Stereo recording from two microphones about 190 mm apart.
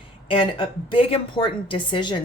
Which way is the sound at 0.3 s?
25° left (ahead or behind).